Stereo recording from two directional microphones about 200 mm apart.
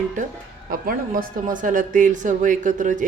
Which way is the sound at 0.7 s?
45° right (ahead or behind).